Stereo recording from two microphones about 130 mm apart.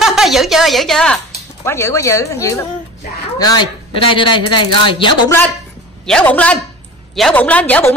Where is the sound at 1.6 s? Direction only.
20° left (ahead or behind).